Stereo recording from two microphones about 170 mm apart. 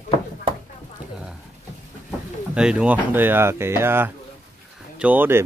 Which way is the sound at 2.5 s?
5° right (ahead or behind).